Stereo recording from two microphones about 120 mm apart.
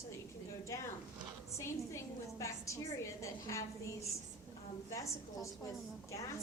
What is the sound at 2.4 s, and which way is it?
A woman's voice, 25° left (ahead or behind).